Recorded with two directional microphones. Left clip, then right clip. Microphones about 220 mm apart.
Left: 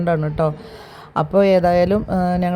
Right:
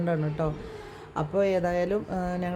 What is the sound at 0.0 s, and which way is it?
Speech, 30° left (ahead or behind).